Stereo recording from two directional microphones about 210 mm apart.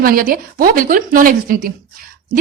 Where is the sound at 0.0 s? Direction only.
45° right (ahead or behind).